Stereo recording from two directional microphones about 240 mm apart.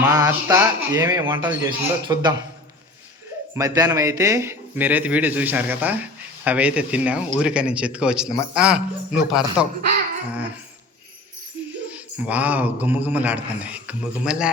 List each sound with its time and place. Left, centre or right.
0.1 s a man's voice: centre
3.5 s a man's voice: centre
11.9 s a man's voice: centre